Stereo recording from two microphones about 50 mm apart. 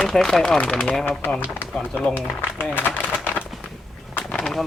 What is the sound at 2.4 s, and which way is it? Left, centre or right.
Speech, left.